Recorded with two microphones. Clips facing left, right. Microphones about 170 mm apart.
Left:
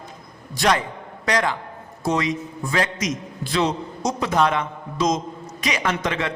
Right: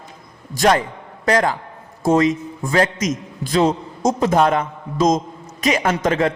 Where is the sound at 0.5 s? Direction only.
45° right (ahead or behind).